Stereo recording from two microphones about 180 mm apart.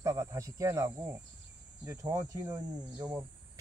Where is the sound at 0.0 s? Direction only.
15° right (ahead or behind).